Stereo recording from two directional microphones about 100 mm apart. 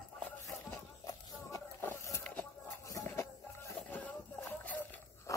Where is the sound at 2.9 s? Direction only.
30° left (ahead or behind).